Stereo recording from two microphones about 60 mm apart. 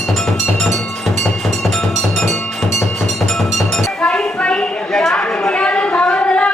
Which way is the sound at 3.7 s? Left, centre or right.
Centre.